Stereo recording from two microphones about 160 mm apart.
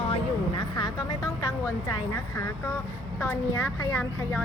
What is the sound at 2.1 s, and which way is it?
Speech, 20° left (ahead or behind).